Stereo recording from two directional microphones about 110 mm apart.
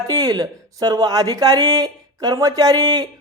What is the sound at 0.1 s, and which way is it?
Speech, 35° right (ahead or behind).